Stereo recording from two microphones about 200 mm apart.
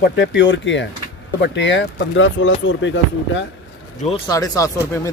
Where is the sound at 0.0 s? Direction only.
60° left (ahead or behind).